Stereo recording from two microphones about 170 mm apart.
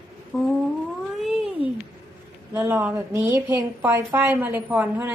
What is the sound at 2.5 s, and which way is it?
Speech, 10° right (ahead or behind).